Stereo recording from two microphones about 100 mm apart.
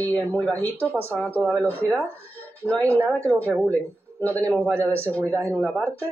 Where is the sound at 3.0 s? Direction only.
15° left (ahead or behind).